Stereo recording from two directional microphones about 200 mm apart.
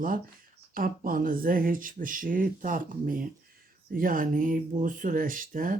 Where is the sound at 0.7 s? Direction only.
45° right (ahead or behind).